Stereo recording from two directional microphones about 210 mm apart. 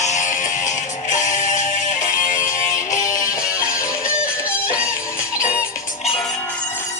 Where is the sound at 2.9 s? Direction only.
35° left (ahead or behind).